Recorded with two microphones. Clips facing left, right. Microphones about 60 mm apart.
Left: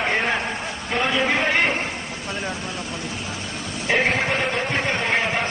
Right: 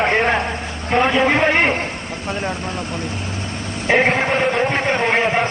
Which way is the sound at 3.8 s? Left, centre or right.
Right.